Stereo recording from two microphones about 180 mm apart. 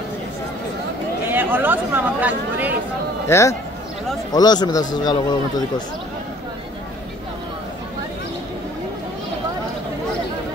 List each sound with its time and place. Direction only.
1.3 s speech: 10° right (ahead or behind)
3.3 s a man's voice: 15° left (ahead or behind)